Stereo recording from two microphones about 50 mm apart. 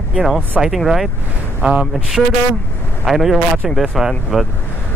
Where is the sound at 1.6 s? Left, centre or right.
Right.